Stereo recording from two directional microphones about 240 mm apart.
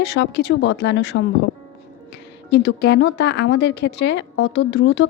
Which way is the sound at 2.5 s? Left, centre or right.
Left.